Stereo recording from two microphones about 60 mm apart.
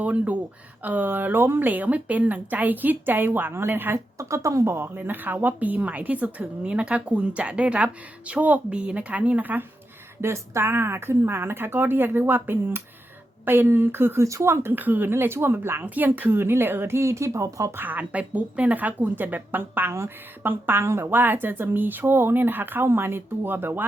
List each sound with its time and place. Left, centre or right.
0.0 s a woman's voice: right
4.2 s speech: right
4.9 s a woman's voice: right
10.2 s a woman's voice: right
14.2 s speech: right
14.5 s a woman's voice: right
15.1 s speech: right
15.8 s a woman's voice: right
17.7 s a woman's voice: right
20.8 s speech: right
21.1 s a woman's voice: right